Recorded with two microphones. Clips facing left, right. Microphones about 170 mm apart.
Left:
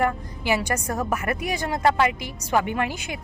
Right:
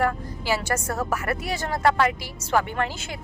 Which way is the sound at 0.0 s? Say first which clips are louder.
Left 1 dB; 15° left (ahead or behind).